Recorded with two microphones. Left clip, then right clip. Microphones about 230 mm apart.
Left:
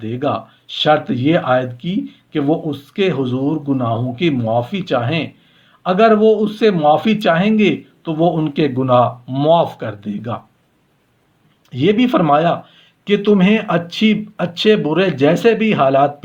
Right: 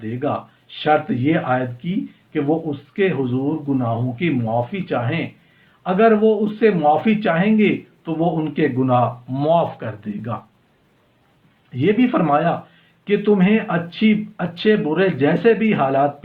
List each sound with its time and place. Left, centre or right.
0.0 s speech: left
11.7 s speech: left